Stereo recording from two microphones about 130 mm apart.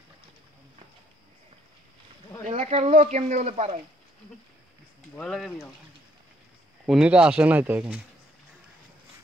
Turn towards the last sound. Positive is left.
turn(degrees=-10)  # may be behind; listen again after turning